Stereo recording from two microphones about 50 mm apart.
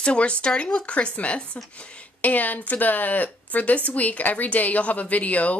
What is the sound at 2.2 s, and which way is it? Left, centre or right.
A woman's voice, left.